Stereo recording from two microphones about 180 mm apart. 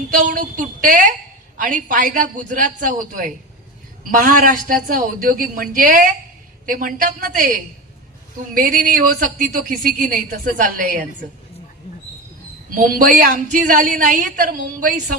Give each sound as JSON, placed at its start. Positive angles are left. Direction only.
{"t": 0.1, "sound": "a woman's voice", "side_deg": -45}
{"t": 8.5, "sound": "a woman's voice", "side_deg": -50}
{"t": 12.7, "sound": "a woman's voice", "side_deg": -50}